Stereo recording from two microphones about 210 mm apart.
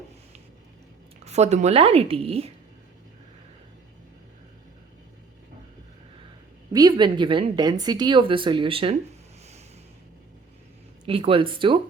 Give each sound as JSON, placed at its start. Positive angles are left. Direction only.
{"t": 1.2, "sound": "a woman's voice", "side_deg": -30}
{"t": 6.7, "sound": "a woman's voice", "side_deg": -20}
{"t": 11.0, "sound": "a woman's voice", "side_deg": -25}